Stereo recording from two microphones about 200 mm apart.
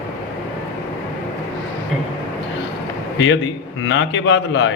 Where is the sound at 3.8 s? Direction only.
65° left (ahead or behind).